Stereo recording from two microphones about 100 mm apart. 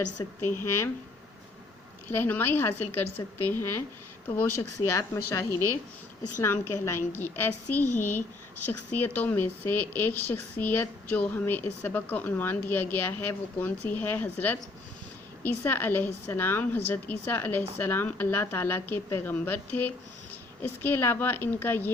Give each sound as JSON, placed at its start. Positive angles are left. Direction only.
{"t": 0.4, "sound": "speech", "side_deg": 25}
{"t": 2.0, "sound": "a woman's voice", "side_deg": 20}
{"t": 15.6, "sound": "speech", "side_deg": 20}